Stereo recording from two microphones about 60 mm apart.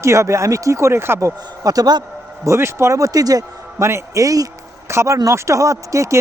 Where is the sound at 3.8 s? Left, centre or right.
Right.